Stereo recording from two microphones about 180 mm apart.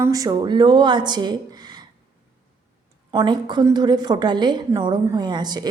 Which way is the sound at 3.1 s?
25° right (ahead or behind).